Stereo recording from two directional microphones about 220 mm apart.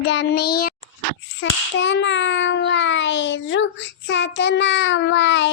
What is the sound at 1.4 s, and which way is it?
Child singing, 55° left (ahead or behind).